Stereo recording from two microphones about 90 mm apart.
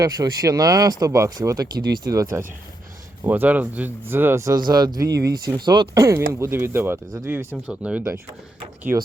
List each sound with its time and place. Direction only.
0.0 s speech: 40° right (ahead or behind)
3.2 s speech: 20° right (ahead or behind)
4.5 s speech: 50° right (ahead or behind)
6.1 s speech: 25° right (ahead or behind)
7.5 s speech: 10° right (ahead or behind)